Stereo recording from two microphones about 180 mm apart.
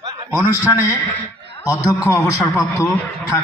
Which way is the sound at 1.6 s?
15° left (ahead or behind).